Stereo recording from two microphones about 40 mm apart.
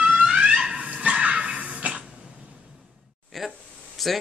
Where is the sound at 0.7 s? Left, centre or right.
Right.